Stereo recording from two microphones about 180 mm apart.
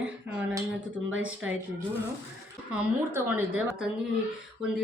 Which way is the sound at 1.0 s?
90° right.